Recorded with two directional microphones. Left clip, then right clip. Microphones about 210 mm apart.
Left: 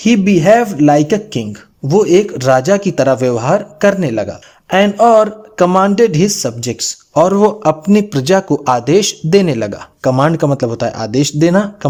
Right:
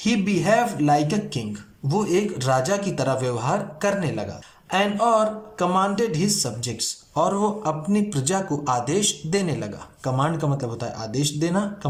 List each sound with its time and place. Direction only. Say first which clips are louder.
0.0 s speech: left 12 dB; 40° left (ahead or behind)